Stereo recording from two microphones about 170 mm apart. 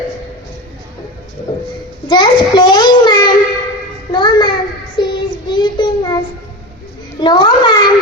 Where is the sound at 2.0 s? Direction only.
25° left (ahead or behind).